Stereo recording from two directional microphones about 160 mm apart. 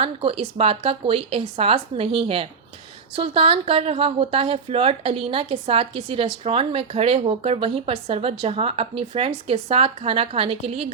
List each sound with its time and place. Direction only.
0.0 s a woman's voice: 35° right (ahead or behind)